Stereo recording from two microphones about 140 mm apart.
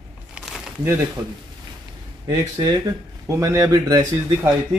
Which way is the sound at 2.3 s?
25° right (ahead or behind).